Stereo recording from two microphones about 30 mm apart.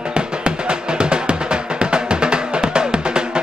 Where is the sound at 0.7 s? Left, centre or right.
Right.